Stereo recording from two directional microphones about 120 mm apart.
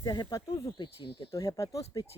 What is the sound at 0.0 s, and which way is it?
Speech, 35° left (ahead or behind).